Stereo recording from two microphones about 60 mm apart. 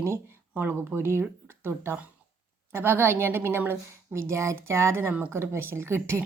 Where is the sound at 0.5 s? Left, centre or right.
Right.